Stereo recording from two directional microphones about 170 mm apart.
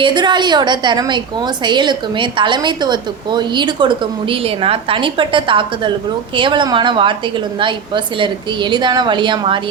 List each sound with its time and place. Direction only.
0.0 s a woman's voice: 25° right (ahead or behind)